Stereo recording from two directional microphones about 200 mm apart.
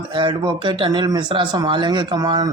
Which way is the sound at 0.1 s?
25° right (ahead or behind).